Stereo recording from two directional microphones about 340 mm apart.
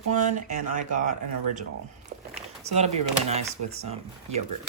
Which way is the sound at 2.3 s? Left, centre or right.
Centre.